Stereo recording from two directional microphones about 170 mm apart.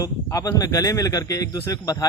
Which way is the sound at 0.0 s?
20° left (ahead or behind).